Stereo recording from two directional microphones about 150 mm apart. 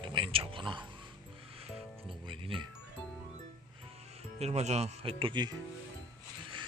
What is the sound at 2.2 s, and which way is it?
Speech, 35° right (ahead or behind).